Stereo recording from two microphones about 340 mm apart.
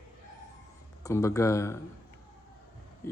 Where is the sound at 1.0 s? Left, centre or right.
Centre.